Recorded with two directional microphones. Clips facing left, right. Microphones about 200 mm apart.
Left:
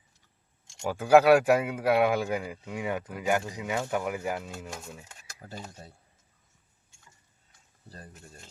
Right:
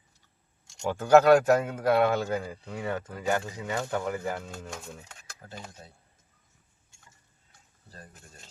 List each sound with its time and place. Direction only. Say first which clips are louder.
0.8 s speech: even; 10° left (ahead or behind)